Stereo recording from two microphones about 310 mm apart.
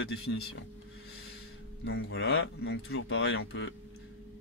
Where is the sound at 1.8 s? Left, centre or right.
Left.